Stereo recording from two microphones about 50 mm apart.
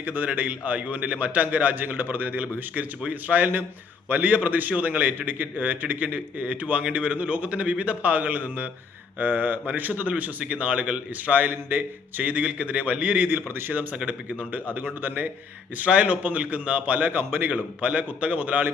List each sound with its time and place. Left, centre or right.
0.0 s a man's voice: right
13.3 s a man's voice: right
13.9 s a man's voice: right
14.3 s a man's voice: right
15.8 s a man's voice: right
17.1 s a man's voice: right
17.7 s a man's voice: right